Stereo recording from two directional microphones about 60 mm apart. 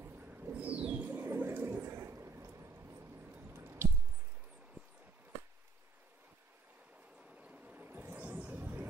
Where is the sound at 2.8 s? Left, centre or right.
Right.